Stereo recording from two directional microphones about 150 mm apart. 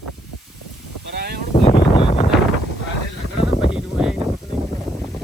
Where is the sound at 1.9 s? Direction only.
35° left (ahead or behind).